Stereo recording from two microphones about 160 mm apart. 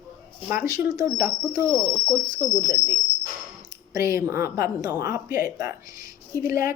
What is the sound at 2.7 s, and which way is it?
Speech, 65° left (ahead or behind).